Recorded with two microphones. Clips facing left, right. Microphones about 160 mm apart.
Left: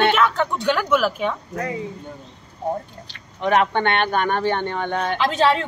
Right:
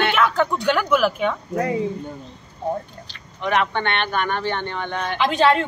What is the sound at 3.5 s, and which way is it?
Speech, 45° left (ahead or behind).